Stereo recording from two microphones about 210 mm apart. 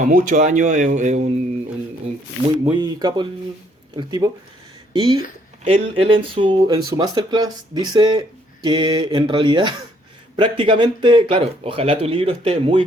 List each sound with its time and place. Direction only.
0.0 s speech: 40° right (ahead or behind)
2.1 s a sound: 30° right (ahead or behind)
2.6 s speech: 20° right (ahead or behind)